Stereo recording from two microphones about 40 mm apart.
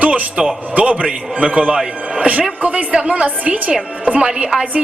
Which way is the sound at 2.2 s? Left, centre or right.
Right.